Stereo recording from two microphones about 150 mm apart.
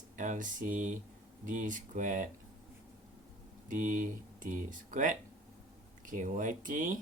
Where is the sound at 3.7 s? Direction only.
60° right (ahead or behind).